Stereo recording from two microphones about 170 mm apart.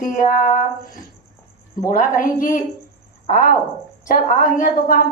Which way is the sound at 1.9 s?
55° left (ahead or behind).